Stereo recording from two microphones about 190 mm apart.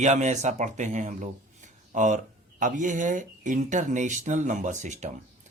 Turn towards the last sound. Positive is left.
turn(degrees=-40)  # may be behind; listen again after turning